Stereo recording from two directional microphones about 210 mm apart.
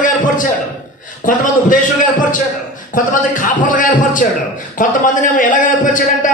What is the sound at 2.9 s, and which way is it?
A man's voice, 40° left (ahead or behind).